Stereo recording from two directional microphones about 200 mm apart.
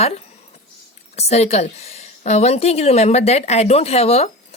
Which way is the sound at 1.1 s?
35° left (ahead or behind).